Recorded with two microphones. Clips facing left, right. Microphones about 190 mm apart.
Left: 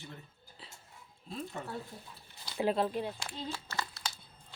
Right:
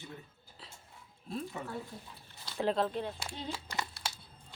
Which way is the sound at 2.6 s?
10° left (ahead or behind).